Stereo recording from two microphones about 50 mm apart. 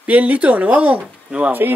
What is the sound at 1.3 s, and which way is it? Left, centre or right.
Speech, right.